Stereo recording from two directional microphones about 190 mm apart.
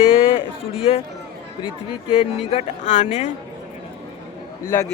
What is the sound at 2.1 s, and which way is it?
Speech, 30° left (ahead or behind).